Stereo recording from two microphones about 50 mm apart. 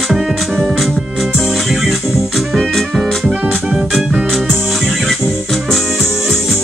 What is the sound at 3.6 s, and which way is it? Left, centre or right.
Music, centre.